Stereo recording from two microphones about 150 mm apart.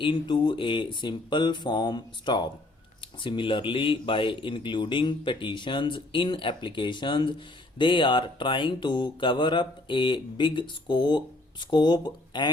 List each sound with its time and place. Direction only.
0.0 s speech: 35° left (ahead or behind)